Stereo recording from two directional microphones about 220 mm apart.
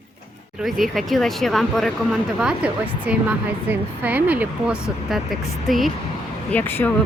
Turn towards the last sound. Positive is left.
turn(degrees=10)  # may be behind; listen again after turning